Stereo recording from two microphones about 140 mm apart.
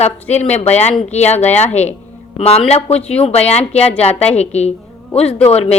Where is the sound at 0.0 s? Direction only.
50° left (ahead or behind).